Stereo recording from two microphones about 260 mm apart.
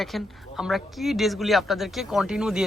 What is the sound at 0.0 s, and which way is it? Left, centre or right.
A man's voice, centre.